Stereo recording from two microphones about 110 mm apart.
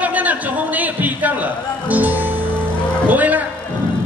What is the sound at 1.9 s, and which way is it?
Music, 15° right (ahead or behind).